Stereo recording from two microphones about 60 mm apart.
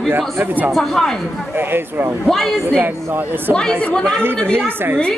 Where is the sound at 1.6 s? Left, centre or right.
Right.